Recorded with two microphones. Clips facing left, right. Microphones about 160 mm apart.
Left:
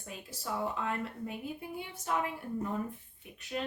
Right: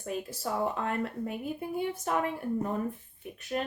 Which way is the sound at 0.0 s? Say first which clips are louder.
Right 9 dB; 50° right (ahead or behind).